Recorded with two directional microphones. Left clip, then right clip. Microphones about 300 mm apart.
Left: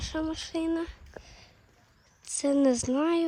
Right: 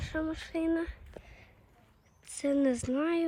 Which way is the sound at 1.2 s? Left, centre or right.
Centre.